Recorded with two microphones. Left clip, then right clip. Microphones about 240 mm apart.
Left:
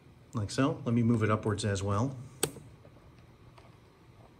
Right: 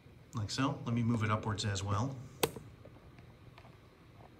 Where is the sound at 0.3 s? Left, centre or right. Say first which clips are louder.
Left 5 dB; centre.